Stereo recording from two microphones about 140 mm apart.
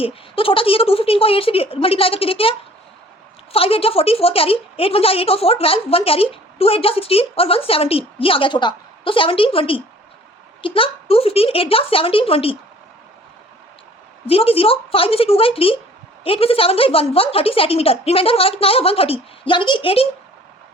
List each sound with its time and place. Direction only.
0.0 s a woman's voice: 40° left (ahead or behind)
14.3 s a woman's voice: 40° left (ahead or behind)